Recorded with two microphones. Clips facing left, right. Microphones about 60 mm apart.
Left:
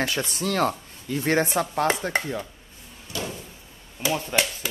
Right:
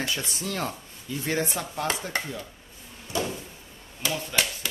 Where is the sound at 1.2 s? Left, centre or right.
Left.